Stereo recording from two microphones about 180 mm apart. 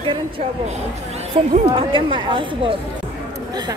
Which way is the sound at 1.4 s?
30° right (ahead or behind).